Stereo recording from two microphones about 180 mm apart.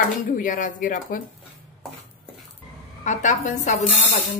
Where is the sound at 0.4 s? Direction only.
45° left (ahead or behind).